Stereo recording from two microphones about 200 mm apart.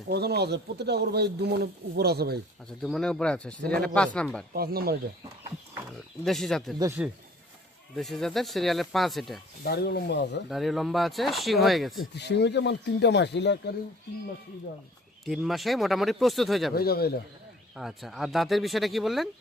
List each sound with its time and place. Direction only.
0.1 s speech: 55° right (ahead or behind)
2.8 s speech: centre (ahead or behind)
4.5 s speech: 50° right (ahead or behind)
6.2 s speech: centre (ahead or behind)
6.7 s speech: 10° right (ahead or behind)
7.9 s speech: centre (ahead or behind)
9.6 s speech: 55° left (ahead or behind)
10.5 s speech: centre (ahead or behind)
12.1 s speech: 60° left (ahead or behind)
15.2 s speech: centre (ahead or behind)
16.7 s a man's voice: 50° left (ahead or behind)
17.7 s speech: centre (ahead or behind)